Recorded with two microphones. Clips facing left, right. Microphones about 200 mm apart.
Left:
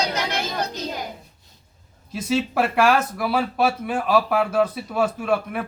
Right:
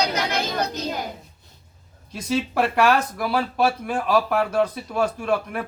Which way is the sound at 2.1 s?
5° left (ahead or behind).